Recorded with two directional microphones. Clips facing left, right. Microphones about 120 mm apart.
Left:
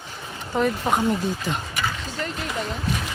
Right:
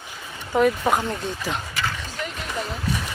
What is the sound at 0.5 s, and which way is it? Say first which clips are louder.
Speech: right 3 dB; centre (ahead or behind).